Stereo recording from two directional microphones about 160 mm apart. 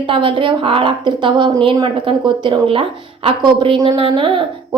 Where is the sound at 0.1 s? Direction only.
30° right (ahead or behind).